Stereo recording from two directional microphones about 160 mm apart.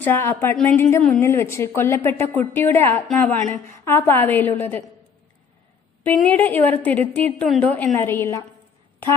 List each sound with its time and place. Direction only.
0.0 s a woman's voice: 15° left (ahead or behind)
6.1 s a woman's voice: 10° left (ahead or behind)